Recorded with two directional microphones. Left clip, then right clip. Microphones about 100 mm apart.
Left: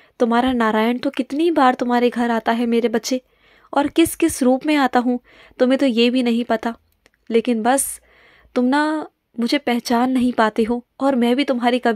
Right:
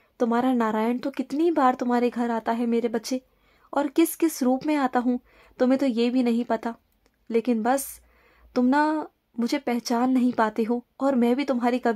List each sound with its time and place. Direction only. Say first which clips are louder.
0.2 s a woman's voice: left 6 dB; 25° left (ahead or behind)